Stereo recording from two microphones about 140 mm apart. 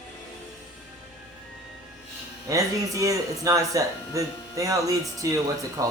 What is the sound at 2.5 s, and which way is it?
Speech, 25° right (ahead or behind).